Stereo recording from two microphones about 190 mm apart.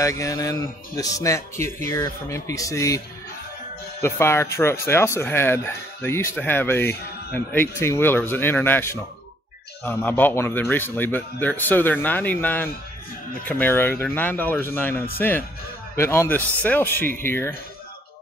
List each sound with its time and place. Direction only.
0.0 s speech: 15° left (ahead or behind)
4.0 s speech: 15° left (ahead or behind)